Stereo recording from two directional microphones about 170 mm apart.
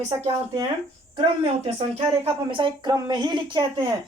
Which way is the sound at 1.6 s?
35° right (ahead or behind).